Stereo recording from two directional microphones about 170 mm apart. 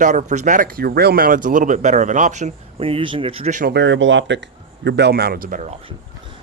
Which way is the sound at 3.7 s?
90° right.